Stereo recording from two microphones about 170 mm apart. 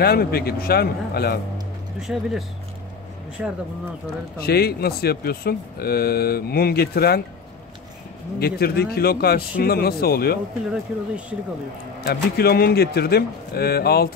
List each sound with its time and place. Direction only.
0.0 s speech: 65° left (ahead or behind)
2.0 s speech: centre (ahead or behind)
4.4 s speech: 65° left (ahead or behind)
8.4 s speech: 65° left (ahead or behind)
10.7 s speech: 5° right (ahead or behind)
12.1 s a man's voice: 65° left (ahead or behind)